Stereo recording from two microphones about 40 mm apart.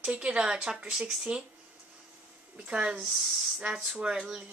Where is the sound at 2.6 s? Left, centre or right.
Right.